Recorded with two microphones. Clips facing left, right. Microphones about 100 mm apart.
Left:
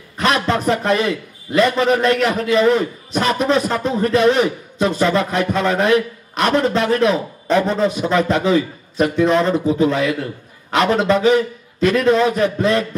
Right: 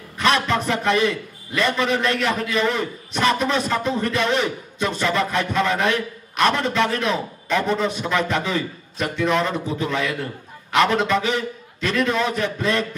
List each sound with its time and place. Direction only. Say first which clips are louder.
0.5 s a man's voice: left 4 dB; 35° left (ahead or behind)